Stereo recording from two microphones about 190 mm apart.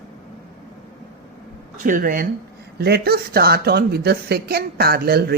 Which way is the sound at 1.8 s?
45° right (ahead or behind).